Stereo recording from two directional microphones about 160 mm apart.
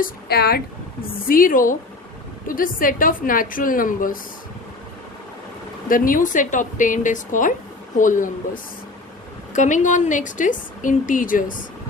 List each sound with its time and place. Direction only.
0.0 s speech: 75° left (ahead or behind)
1.3 s a woman's voice: 60° left (ahead or behind)
5.9 s a woman's voice: 55° left (ahead or behind)
9.5 s a woman's voice: 50° left (ahead or behind)